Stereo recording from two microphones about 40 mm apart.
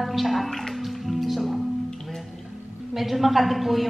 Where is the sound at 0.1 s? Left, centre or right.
Centre.